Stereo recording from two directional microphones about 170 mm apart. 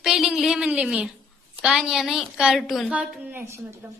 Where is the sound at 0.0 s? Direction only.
5° right (ahead or behind).